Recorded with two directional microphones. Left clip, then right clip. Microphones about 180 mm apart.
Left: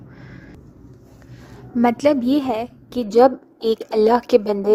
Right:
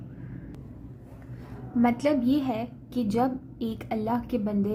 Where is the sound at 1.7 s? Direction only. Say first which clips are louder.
Left 8 dB; 40° left (ahead or behind).